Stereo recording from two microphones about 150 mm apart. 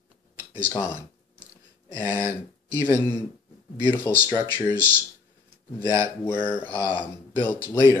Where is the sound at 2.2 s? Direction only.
15° right (ahead or behind).